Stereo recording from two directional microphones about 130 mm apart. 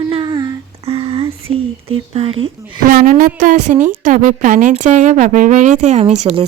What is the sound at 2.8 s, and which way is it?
A woman's voice, 90° right.